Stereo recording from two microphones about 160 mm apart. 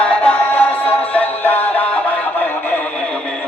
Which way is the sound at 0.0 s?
10° left (ahead or behind).